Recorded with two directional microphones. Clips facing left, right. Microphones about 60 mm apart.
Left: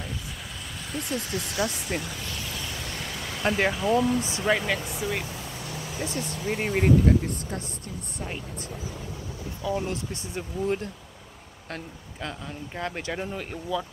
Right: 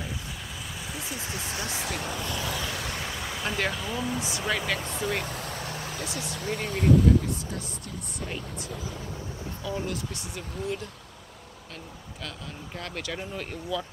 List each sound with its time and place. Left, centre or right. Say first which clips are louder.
0.8 s speech: left 7 dB; centre
1.2 s speech: left 2 dB; right
1.7 s speech: left 1 dB; right
2.8 s vehicle: right 1 dB; centre
3.4 s speech: left 6 dB; centre
3.8 s speech: left 8 dB; centre
4.5 s speech: left 4 dB; centre
5.2 s vehicle: right 2 dB; right
5.6 s vehicle: right 1 dB; right
5.9 s speech: left 3 dB; left
6.4 s speech: left 3 dB; left
6.7 s speech: even; left
9.6 s speech: left 4 dB; left
12.2 s speech: left 5 dB; left